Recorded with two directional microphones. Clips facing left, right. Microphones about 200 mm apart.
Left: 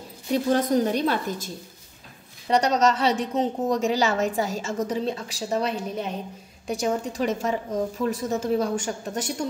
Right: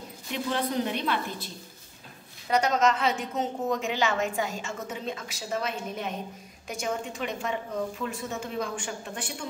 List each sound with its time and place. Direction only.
0.3 s a woman's voice: 45° left (ahead or behind)
2.5 s a woman's voice: 35° left (ahead or behind)